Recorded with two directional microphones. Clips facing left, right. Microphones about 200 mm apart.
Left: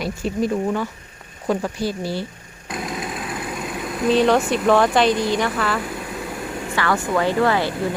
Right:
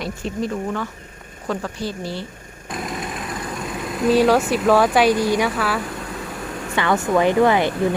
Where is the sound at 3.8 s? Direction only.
Centre (ahead or behind).